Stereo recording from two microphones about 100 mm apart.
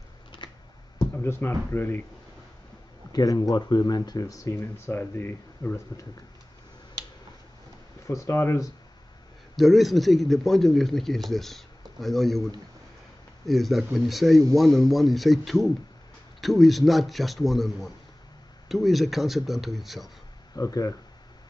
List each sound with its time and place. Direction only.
0.4 s a sound: 50° left (ahead or behind)
1.2 s speech: 25° left (ahead or behind)
3.1 s speech: 40° left (ahead or behind); by 5.8 s 20° left (ahead or behind)
8.1 s speech: 30° left (ahead or behind)
9.6 s speech: centre (ahead or behind)
13.5 s speech: centre (ahead or behind)
20.5 s speech: 35° left (ahead or behind)